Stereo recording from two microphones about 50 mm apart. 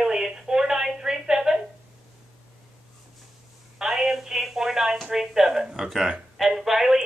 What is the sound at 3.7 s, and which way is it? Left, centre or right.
A woman's voice, centre.